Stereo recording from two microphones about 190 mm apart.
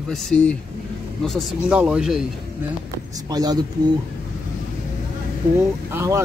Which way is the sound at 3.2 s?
20° right (ahead or behind).